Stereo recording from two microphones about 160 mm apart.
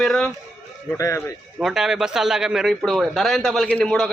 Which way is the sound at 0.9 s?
20° left (ahead or behind).